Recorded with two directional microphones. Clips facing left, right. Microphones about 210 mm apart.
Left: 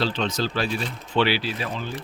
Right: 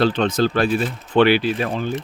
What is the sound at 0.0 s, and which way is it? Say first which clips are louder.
Speech: right 7 dB; 55° right (ahead or behind).